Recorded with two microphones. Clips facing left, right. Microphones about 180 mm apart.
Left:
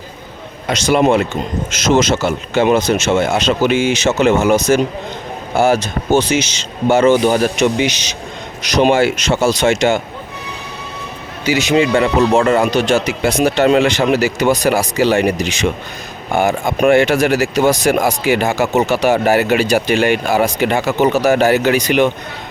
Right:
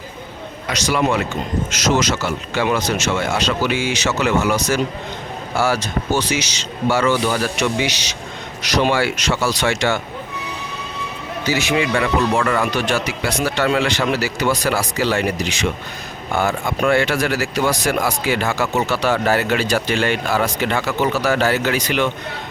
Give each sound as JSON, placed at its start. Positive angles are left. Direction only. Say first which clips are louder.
{"t": 0.7, "sound": "speech", "louder": "left 6 dB", "side_deg": 25}
{"t": 5.5, "sound": "speech", "louder": "left 6 dB", "side_deg": 20}
{"t": 11.4, "sound": "speech", "louder": "left 6 dB", "side_deg": 25}
{"t": 18.4, "sound": "speech", "louder": "left 5 dB", "side_deg": 40}
{"t": 18.9, "sound": "speech", "louder": "left 5 dB", "side_deg": 15}